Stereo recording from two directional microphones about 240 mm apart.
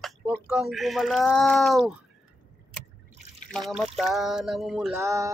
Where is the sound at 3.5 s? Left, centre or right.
Centre.